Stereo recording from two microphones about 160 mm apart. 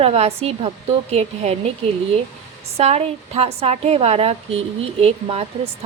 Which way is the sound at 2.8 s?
40° right (ahead or behind).